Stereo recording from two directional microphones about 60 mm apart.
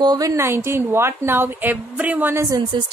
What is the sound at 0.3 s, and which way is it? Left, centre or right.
A woman's voice, right.